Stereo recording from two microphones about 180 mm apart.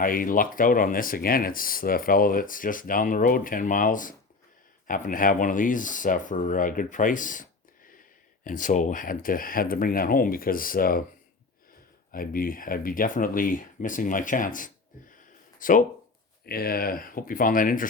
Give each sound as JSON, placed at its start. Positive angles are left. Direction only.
{"t": 0.0, "sound": "speech", "side_deg": 50}
{"t": 12.1, "sound": "speech", "side_deg": 50}